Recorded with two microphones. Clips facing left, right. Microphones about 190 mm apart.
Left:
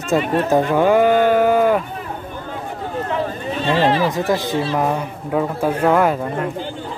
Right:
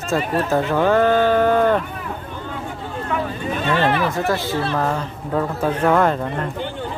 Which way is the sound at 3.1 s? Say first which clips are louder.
Right 2 dB; 30° left (ahead or behind).